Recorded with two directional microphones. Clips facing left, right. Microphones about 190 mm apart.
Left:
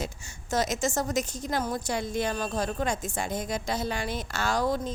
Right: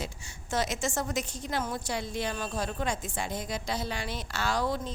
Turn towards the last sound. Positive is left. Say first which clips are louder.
# left 3 dB
turn(degrees=45)  # may be behind; listen again after turning